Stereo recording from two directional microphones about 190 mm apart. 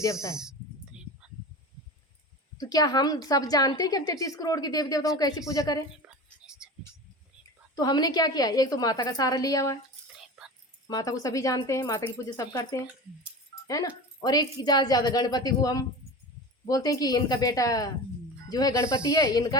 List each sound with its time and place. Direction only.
0.0 s speech: 15° left (ahead or behind)
2.6 s a woman's voice: 20° left (ahead or behind)
6.1 s whispering: 5° right (ahead or behind)
7.8 s a woman's voice: 20° left (ahead or behind)
10.8 s a woman's voice: 20° left (ahead or behind)